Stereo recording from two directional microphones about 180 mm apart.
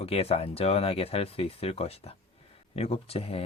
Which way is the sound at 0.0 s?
35° left (ahead or behind).